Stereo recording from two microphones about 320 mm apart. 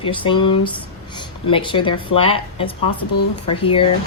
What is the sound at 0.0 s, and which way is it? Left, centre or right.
A woman's voice, centre.